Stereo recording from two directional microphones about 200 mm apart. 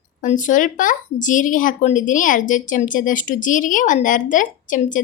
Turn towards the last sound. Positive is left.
turn(degrees=40)  # may be behind; listen again after turning